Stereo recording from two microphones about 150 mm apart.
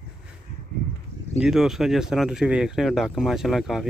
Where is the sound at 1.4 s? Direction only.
Centre (ahead or behind).